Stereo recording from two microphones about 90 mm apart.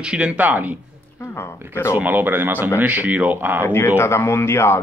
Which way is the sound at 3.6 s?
30° left (ahead or behind).